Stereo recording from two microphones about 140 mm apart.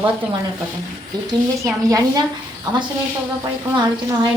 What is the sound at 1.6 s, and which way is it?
Speech, 25° right (ahead or behind).